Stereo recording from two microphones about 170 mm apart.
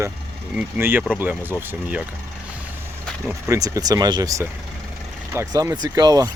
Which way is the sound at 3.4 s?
15° right (ahead or behind).